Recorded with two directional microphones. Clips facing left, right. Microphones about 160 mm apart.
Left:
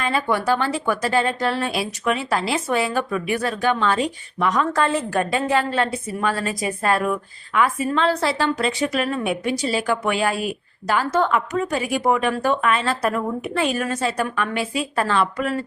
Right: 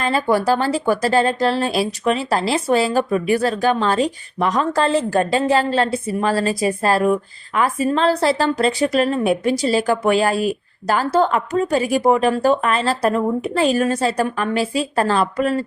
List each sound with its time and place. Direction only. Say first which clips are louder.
0.0 s a woman's voice: right 4 dB; 35° right (ahead or behind)